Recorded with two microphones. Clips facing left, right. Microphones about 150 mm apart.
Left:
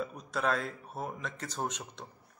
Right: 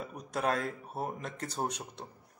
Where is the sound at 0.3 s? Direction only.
40° right (ahead or behind).